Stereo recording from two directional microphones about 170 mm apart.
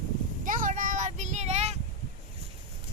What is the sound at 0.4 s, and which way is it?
Child singing, 50° right (ahead or behind).